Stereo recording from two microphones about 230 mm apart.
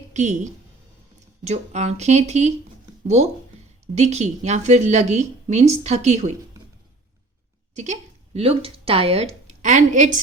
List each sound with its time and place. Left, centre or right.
0.1 s speech: right
3.9 s speech: right
7.8 s speech: right